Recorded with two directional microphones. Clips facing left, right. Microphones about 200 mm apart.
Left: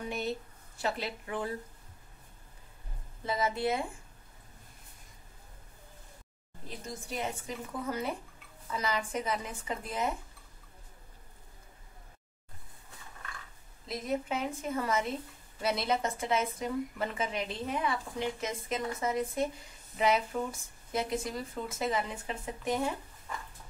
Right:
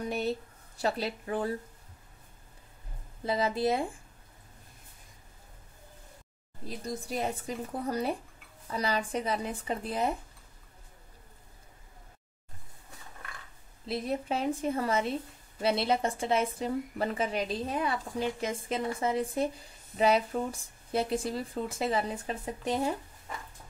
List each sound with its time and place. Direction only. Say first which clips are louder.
0.0 s a sound: right 4 dB; 35° right (ahead or behind)
0.7 s a woman's voice: right 3 dB; 35° right (ahead or behind)
3.3 s a woman's voice: right 3 dB; 30° right (ahead or behind)
6.9 s a woman's voice: right 4 dB; 35° right (ahead or behind)
13.8 s a woman's voice: right 2 dB; 30° right (ahead or behind)